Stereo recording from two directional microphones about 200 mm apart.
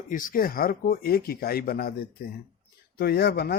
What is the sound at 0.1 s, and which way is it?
Speech, 40° left (ahead or behind).